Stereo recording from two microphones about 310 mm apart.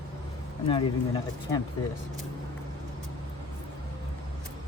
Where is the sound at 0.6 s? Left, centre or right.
Centre.